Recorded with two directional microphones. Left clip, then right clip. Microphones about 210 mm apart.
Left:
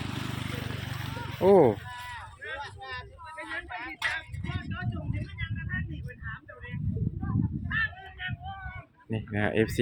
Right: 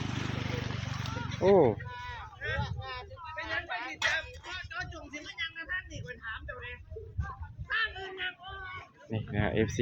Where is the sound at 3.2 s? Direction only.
50° right (ahead or behind).